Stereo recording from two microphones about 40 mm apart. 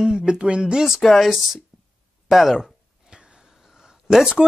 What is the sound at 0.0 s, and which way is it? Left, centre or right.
Speech, right.